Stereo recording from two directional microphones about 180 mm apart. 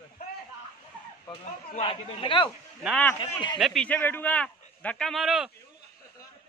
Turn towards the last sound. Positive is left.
turn(degrees=0)  # may be behind; listen again after turning